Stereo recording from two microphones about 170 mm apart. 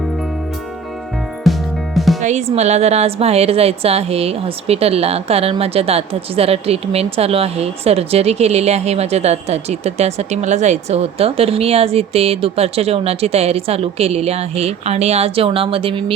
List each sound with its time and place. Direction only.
1.5 s music: centre (ahead or behind)
2.2 s a woman's voice: 40° right (ahead or behind)